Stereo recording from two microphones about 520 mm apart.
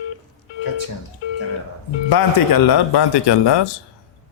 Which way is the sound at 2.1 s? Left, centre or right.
Left.